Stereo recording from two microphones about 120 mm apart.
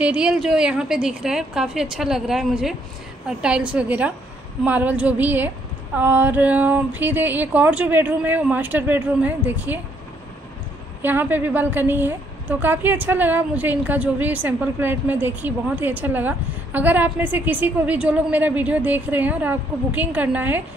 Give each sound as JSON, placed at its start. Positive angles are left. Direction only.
{"t": 0.0, "sound": "a woman's voice", "side_deg": -10}
{"t": 11.0, "sound": "a woman's voice", "side_deg": -15}